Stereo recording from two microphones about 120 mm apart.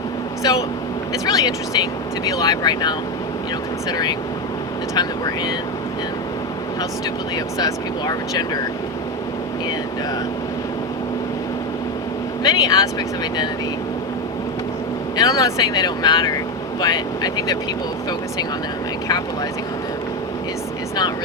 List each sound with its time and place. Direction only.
0.4 s speech: 35° left (ahead or behind)
4.9 s speech: 35° left (ahead or behind)
7.3 s speech: 35° left (ahead or behind)
12.4 s speech: 30° left (ahead or behind)
15.1 s speech: 35° left (ahead or behind)